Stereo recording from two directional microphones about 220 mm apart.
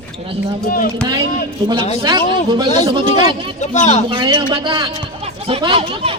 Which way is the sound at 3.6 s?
30° left (ahead or behind).